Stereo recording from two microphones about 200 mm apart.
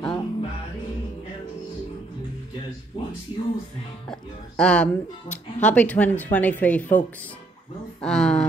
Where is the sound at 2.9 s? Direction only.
30° left (ahead or behind).